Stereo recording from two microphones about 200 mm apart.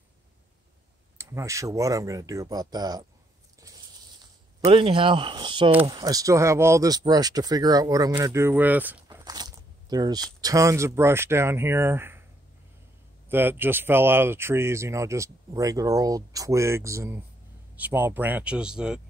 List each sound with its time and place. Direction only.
1.1 s speech: 15° right (ahead or behind)
4.6 s speech: 30° right (ahead or behind); by 8.9 s 10° right (ahead or behind)
9.0 s biting: 20° right (ahead or behind)
10.4 s speech: 15° right (ahead or behind)
13.3 s speech: 10° right (ahead or behind)